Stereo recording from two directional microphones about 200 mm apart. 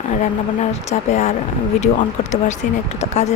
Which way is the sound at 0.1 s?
35° left (ahead or behind).